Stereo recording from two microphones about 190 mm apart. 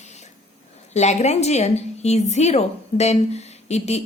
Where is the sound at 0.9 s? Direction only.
35° left (ahead or behind).